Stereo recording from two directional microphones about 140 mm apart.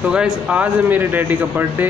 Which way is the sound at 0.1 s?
10° right (ahead or behind).